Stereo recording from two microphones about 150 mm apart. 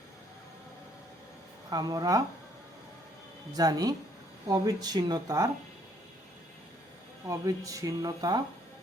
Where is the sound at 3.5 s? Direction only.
25° right (ahead or behind).